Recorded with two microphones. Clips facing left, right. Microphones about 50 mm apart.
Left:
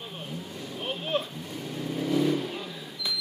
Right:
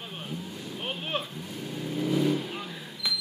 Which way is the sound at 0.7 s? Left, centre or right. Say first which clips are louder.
Left 3 dB; centre.